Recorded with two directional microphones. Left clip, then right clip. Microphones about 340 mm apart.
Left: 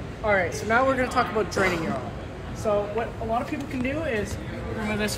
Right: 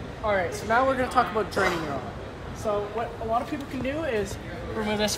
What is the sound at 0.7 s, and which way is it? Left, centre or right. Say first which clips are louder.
Speech: even; centre.